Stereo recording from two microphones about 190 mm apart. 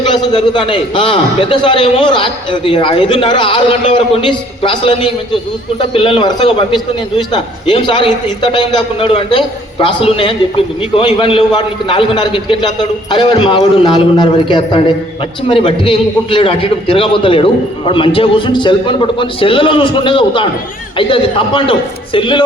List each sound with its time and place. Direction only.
0.1 s a man's voice: 25° left (ahead or behind)